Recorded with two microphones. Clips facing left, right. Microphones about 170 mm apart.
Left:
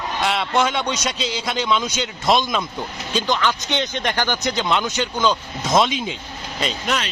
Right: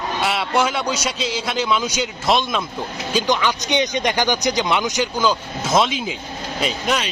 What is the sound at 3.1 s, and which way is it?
A man's voice, 15° right (ahead or behind).